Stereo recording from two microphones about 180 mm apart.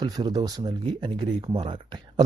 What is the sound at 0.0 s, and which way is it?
Speech, 20° right (ahead or behind).